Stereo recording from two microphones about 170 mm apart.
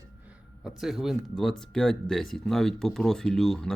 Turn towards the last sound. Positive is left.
turn(degrees=5)  # may be behind; listen again after turning